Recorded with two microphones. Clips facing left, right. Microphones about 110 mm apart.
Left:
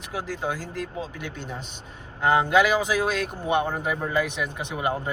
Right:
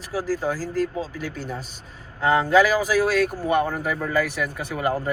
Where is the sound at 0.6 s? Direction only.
35° right (ahead or behind).